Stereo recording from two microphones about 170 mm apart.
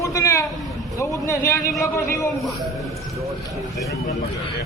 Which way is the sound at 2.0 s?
15° left (ahead or behind).